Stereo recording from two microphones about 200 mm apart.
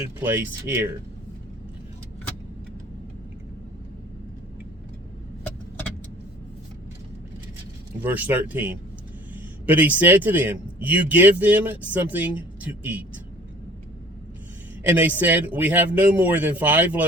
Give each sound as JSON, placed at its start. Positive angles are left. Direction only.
{"t": 0.2, "sound": "a man's voice", "side_deg": -10}
{"t": 8.0, "sound": "a man's voice", "side_deg": -10}
{"t": 14.9, "sound": "a man's voice", "side_deg": -10}